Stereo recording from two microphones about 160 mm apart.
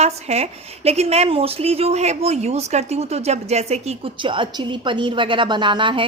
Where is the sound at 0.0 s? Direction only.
40° right (ahead or behind).